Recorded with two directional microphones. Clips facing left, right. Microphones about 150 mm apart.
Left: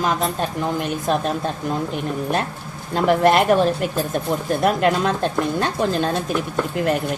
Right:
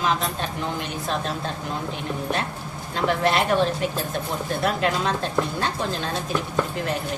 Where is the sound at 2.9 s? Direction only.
50° left (ahead or behind).